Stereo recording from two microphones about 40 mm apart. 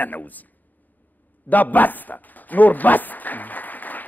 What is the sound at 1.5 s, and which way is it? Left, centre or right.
Speech, left.